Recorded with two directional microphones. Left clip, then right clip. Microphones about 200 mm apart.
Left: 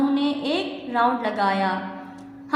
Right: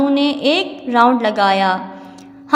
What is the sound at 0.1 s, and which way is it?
A woman's voice, 40° right (ahead or behind).